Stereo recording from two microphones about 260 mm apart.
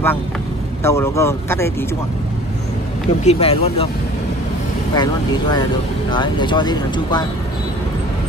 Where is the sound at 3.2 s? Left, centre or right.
Left.